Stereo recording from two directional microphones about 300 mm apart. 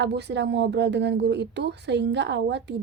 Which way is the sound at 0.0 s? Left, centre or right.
Right.